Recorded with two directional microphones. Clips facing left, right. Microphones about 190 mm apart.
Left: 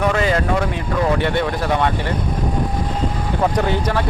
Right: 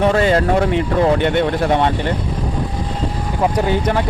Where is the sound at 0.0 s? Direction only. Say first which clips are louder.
Right 4 dB; 30° right (ahead or behind).